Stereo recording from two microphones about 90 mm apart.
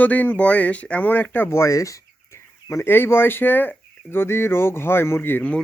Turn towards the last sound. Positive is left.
turn(degrees=20)  # may be behind; listen again after turning